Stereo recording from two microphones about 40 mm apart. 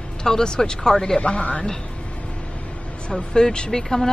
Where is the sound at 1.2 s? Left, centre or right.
Left.